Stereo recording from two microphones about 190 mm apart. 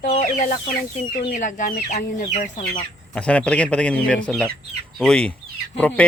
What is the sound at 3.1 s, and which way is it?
Speech, 5° left (ahead or behind).